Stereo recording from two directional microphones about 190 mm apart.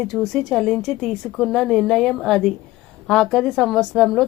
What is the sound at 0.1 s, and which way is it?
A woman's voice, centre (ahead or behind).